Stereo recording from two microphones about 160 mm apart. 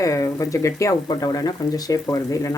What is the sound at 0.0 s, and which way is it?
Speech, 20° left (ahead or behind).